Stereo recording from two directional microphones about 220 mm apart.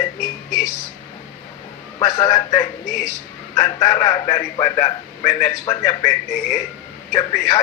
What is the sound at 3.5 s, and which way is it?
A man's voice, 15° left (ahead or behind).